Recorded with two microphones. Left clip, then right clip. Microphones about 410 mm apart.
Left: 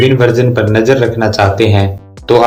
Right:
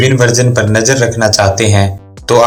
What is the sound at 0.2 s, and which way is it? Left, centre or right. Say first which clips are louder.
Speech: even; centre.